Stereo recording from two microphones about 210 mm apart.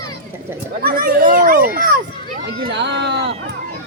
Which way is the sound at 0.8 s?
45° right (ahead or behind).